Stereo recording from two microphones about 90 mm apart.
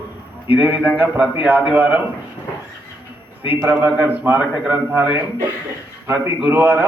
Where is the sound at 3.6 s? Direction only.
20° right (ahead or behind).